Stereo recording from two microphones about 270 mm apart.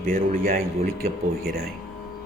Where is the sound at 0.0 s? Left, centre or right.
Right.